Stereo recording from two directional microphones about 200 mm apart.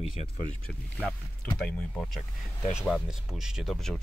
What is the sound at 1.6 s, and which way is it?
Speech, 5° left (ahead or behind).